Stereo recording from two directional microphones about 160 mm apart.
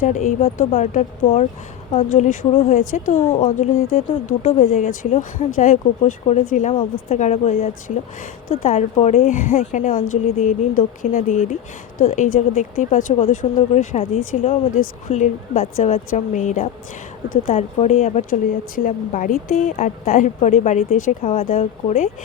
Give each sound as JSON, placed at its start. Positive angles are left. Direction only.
{"t": 0.0, "sound": "speech", "side_deg": 50}
{"t": 18.8, "sound": "speech", "side_deg": 55}